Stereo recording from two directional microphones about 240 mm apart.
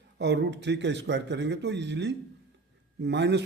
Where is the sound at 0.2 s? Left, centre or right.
Right.